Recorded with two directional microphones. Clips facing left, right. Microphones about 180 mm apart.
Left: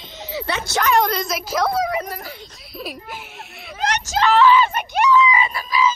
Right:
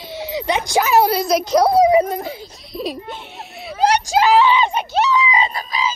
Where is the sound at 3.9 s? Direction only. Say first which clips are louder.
Right 6 dB; 10° right (ahead or behind).